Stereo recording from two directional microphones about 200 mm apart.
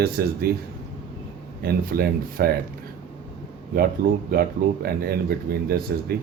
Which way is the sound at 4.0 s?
45° right (ahead or behind).